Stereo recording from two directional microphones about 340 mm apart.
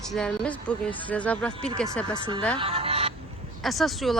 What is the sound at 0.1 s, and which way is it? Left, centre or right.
Speech, centre.